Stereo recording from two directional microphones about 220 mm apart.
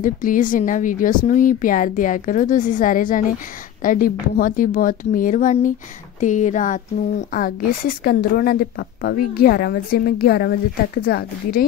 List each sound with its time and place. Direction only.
0.0 s a woman's voice: 40° left (ahead or behind)